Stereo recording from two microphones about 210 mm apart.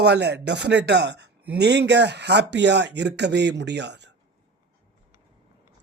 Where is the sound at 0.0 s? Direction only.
55° right (ahead or behind).